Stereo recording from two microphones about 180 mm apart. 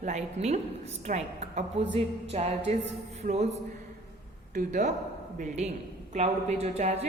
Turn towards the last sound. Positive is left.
turn(degrees=-35)  # may be behind; listen again after turning